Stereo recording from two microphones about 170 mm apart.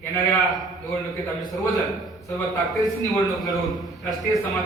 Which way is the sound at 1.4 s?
25° left (ahead or behind).